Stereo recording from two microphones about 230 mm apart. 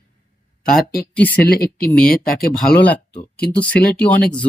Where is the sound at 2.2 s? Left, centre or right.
Left.